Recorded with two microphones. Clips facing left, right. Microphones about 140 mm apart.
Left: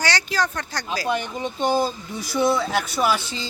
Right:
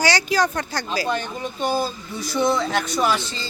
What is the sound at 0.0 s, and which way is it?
Speech, 10° right (ahead or behind).